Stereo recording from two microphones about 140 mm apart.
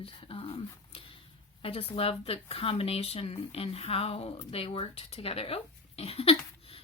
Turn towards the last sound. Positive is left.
turn(degrees=45)  # may be behind; listen again after turning